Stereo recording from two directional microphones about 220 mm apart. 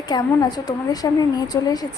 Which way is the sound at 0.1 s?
20° left (ahead or behind).